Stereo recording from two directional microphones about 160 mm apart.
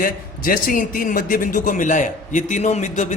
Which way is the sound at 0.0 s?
60° left (ahead or behind).